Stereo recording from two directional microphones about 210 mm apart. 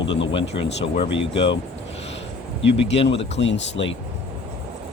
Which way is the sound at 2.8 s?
30° left (ahead or behind).